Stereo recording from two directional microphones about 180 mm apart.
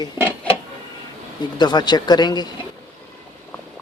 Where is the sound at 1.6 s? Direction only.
25° left (ahead or behind).